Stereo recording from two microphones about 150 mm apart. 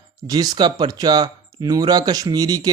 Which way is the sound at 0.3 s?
25° right (ahead or behind).